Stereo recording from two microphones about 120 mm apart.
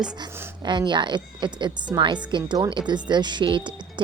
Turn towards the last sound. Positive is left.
turn(degrees=-40)  # may be behind; listen again after turning